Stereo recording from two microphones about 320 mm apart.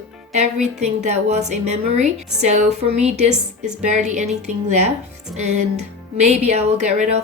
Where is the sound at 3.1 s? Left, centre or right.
Right.